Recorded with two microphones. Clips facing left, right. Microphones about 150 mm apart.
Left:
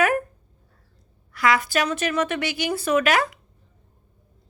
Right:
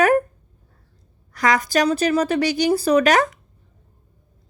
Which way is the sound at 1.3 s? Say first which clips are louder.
Right 2 dB; 40° right (ahead or behind).